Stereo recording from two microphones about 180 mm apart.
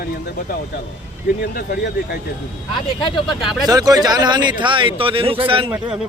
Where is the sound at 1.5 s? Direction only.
65° left (ahead or behind).